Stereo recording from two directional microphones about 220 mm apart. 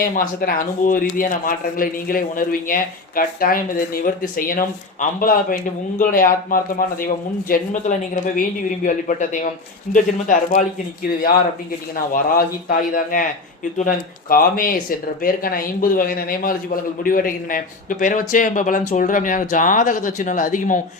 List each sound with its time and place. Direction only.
0.0 s speech: 40° left (ahead or behind)
12.1 s speech: 40° left (ahead or behind)
14.3 s speech: 40° left (ahead or behind)